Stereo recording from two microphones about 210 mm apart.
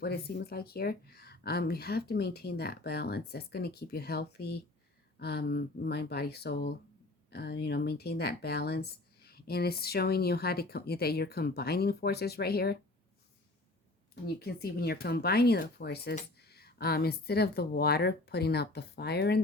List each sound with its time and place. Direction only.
0.0 s speech: 50° left (ahead or behind)
14.3 s speech: 50° left (ahead or behind)